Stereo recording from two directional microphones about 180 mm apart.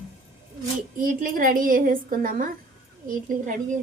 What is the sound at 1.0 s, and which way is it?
A woman's voice, 50° right (ahead or behind).